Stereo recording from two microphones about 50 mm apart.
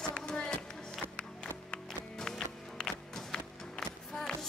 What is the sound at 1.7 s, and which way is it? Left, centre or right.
Music, centre.